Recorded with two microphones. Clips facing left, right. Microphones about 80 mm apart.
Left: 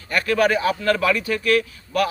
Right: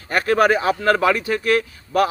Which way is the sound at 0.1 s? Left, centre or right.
Right.